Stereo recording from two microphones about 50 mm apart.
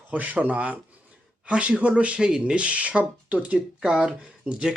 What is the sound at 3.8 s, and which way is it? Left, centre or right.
Speech, centre.